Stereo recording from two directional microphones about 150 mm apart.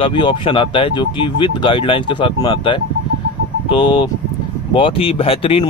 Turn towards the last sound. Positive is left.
turn(degrees=40)  # may be behind; listen again after turning